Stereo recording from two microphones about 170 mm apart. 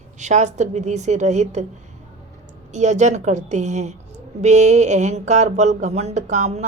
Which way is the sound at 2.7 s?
45° right (ahead or behind).